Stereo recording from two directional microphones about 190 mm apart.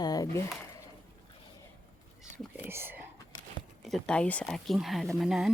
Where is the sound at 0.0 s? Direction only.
20° left (ahead or behind).